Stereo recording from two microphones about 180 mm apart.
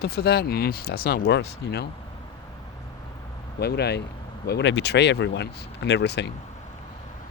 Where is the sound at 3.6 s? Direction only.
65° left (ahead or behind).